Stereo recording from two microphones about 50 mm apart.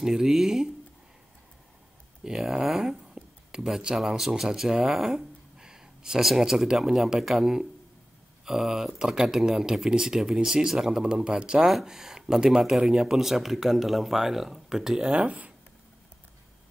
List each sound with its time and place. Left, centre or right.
0.0 s speech: centre
2.2 s speech: centre
11.6 s speech: centre
15.2 s speech: right